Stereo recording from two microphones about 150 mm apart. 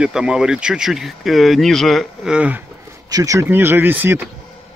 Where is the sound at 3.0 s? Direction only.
25° right (ahead or behind).